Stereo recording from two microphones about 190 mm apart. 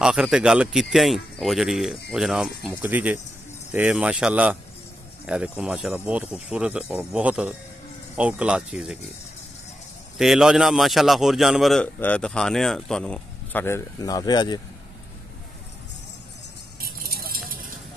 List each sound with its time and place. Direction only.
0.0 s a man's voice: 5° right (ahead or behind)
10.1 s a man's voice: centre (ahead or behind); by 14.6 s 20° left (ahead or behind)
16.8 s a sound: 50° right (ahead or behind)